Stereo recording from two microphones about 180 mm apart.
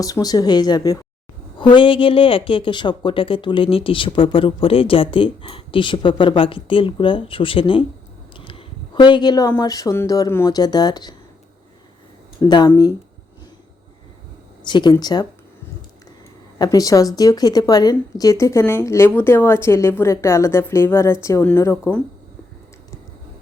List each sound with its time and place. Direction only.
0.0 s speech: 20° left (ahead or behind)
8.4 s a sound: 25° left (ahead or behind)
9.6 s speech: 20° left (ahead or behind)
12.4 s speech: 25° left (ahead or behind)
14.6 s speech: 25° left (ahead or behind)
16.6 s a woman's voice: 20° left (ahead or behind)